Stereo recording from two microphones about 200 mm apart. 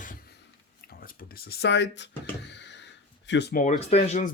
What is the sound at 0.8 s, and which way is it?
Speech, 45° left (ahead or behind).